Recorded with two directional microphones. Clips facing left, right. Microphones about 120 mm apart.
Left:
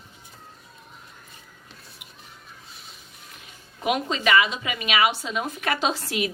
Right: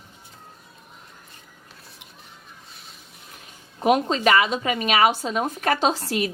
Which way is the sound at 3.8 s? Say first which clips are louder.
Right 5 dB; 40° right (ahead or behind).